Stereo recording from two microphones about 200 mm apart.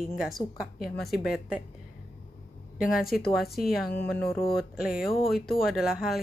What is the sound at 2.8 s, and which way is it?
Speech, centre (ahead or behind).